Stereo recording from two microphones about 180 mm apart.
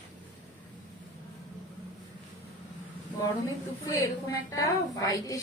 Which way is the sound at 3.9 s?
15° left (ahead or behind).